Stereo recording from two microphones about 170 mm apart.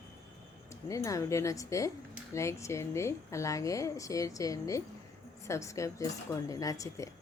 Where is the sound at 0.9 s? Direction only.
20° left (ahead or behind).